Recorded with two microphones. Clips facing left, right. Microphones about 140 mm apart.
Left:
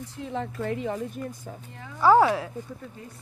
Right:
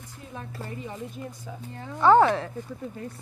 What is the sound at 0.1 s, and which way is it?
A woman's voice, 85° left.